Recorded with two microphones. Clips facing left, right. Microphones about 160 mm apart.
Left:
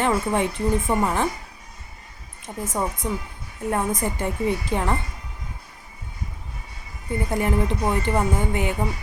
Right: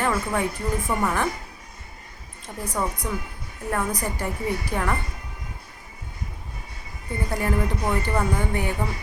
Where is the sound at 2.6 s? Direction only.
25° left (ahead or behind).